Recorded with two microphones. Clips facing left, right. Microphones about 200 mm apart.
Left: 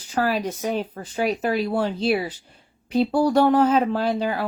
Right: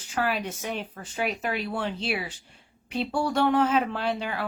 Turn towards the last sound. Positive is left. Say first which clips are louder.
# left 6 dB
turn(degrees=40)  # may be behind; listen again after turning